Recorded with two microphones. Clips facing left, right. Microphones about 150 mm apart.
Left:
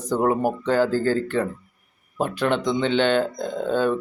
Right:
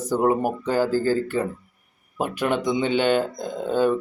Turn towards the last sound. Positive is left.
turn(degrees=-10)  # may be behind; listen again after turning